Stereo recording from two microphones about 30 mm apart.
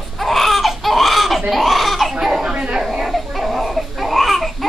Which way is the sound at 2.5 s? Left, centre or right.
Right.